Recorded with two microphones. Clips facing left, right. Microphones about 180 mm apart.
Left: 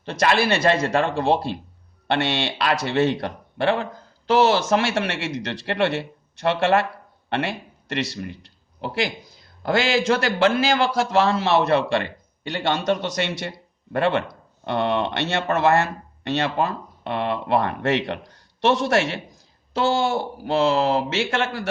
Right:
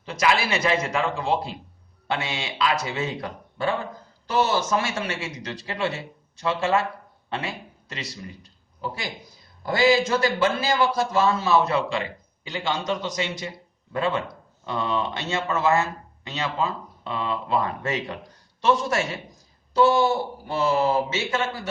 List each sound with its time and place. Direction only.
0.0 s a man's voice: 65° left (ahead or behind)
4.3 s a man's voice: 85° left
19.7 s a man's voice: 85° left